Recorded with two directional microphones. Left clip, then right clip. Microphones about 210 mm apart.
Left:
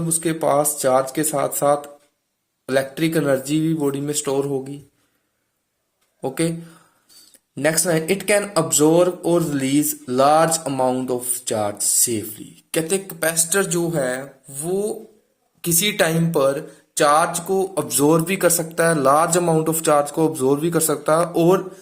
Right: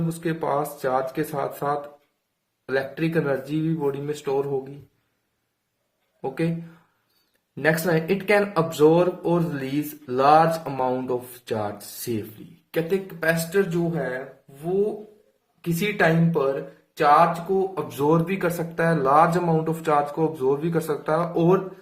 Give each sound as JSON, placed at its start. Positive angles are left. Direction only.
{"t": 0.2, "sound": "speech", "side_deg": 30}
{"t": 6.2, "sound": "speech", "side_deg": 35}
{"t": 7.5, "sound": "speech", "side_deg": 30}
{"t": 12.7, "sound": "speech", "side_deg": 45}
{"t": 15.6, "sound": "speech", "side_deg": 45}